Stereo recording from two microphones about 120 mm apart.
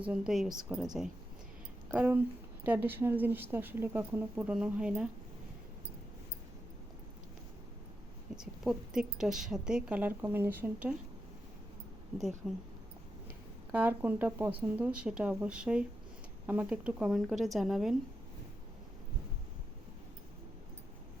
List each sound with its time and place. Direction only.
0.0 s a woman's voice: 5° right (ahead or behind)
1.9 s a woman's voice: 15° right (ahead or behind)
8.4 s a woman's voice: 5° right (ahead or behind)
12.4 s a woman's voice: 5° right (ahead or behind)
13.7 s a woman's voice: 15° right (ahead or behind)